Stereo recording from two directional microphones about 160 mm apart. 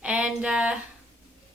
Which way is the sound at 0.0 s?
5° right (ahead or behind).